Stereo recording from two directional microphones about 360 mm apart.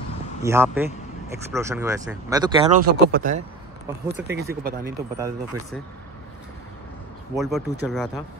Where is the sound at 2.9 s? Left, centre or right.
Right.